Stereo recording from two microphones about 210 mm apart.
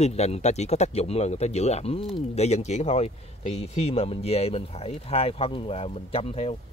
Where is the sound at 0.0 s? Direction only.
30° left (ahead or behind).